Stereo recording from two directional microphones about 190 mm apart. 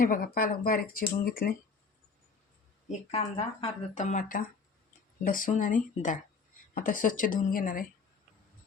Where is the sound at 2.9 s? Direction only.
30° left (ahead or behind).